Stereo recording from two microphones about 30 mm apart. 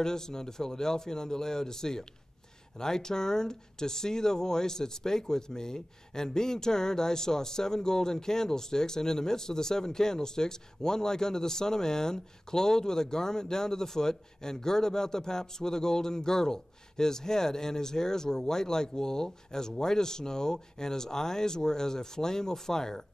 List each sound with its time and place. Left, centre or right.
0.0 s speech: left